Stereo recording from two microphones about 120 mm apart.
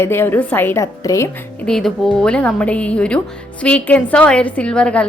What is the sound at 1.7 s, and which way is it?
A woman's voice, 5° left (ahead or behind).